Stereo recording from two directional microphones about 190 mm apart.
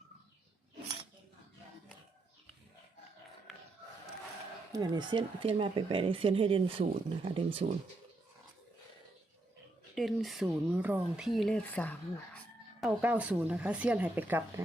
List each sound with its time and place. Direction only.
4.7 s speech: 20° right (ahead or behind)
9.9 s speech: centre (ahead or behind)
12.8 s speech: 5° right (ahead or behind)